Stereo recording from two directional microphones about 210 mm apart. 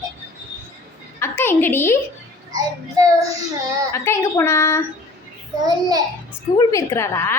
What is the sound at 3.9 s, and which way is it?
Speech, 10° left (ahead or behind).